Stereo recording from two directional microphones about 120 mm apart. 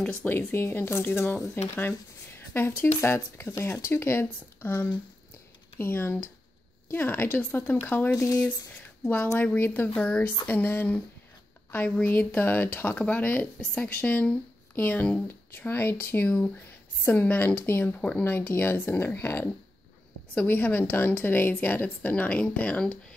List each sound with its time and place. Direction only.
0.5 s speech: 20° left (ahead or behind)
8.1 s speech: 30° left (ahead or behind)
9.1 s speech: 20° left (ahead or behind)